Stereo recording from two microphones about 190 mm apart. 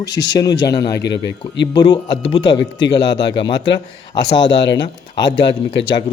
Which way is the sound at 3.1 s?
70° left (ahead or behind).